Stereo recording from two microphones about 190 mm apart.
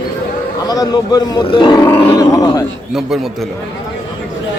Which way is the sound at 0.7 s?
20° left (ahead or behind).